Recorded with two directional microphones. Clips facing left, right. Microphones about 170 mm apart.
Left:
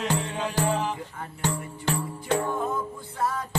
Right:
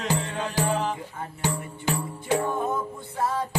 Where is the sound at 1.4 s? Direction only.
10° right (ahead or behind).